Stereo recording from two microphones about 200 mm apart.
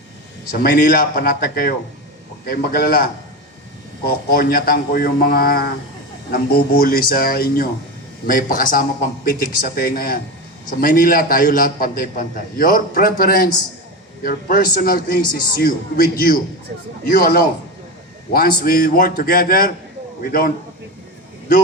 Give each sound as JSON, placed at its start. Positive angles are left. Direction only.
{"t": 0.5, "sound": "a man's voice", "side_deg": 45}